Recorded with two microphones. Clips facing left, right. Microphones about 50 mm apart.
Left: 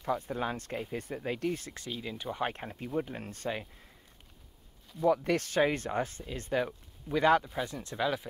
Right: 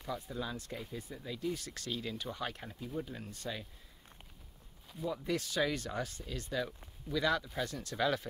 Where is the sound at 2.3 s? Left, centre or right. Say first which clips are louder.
Left 6 dB; left.